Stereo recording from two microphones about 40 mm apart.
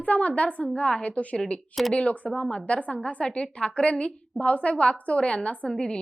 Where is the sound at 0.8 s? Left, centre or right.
Left.